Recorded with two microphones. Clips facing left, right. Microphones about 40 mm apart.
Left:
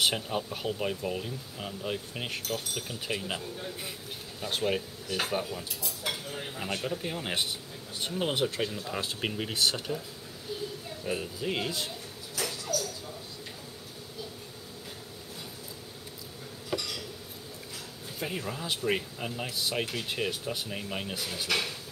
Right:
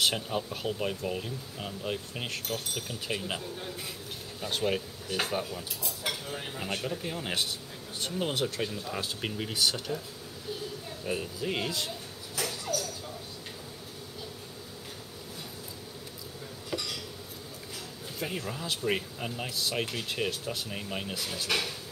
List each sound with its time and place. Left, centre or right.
0.0 s speech: centre
6.9 s speech: centre
11.1 s speech: centre
12.7 s a sound: right
16.7 s a sound: centre
18.2 s speech: centre